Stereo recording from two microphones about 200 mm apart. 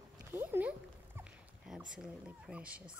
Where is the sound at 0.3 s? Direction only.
10° right (ahead or behind).